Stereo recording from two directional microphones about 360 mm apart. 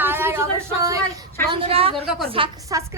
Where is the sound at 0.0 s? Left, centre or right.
Centre.